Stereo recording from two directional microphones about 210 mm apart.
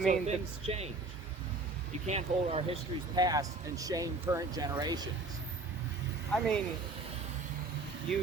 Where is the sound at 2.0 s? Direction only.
30° right (ahead or behind).